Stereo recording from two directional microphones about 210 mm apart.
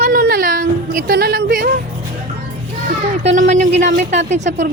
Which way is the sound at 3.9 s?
55° right (ahead or behind).